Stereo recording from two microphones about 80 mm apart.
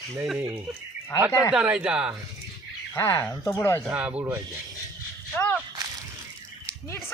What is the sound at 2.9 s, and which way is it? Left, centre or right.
Speech, left.